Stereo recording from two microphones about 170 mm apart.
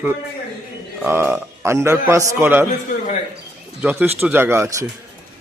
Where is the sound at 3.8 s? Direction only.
10° right (ahead or behind).